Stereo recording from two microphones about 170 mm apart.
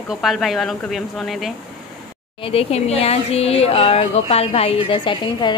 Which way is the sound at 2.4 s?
35° left (ahead or behind).